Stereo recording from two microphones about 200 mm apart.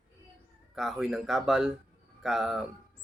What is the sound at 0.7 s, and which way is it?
Speech, centre (ahead or behind).